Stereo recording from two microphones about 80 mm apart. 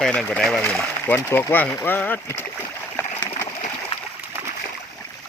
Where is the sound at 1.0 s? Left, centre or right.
Left.